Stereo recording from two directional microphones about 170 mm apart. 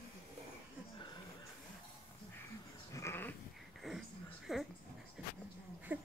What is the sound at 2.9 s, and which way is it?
Goat, 15° left (ahead or behind).